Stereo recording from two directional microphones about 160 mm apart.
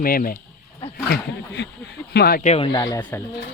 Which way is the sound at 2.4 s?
40° left (ahead or behind).